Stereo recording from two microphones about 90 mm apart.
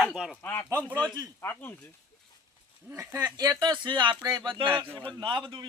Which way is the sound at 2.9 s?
35° right (ahead or behind).